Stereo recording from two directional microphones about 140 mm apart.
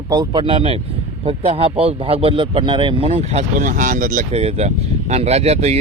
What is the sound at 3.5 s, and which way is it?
Speech, 70° right (ahead or behind).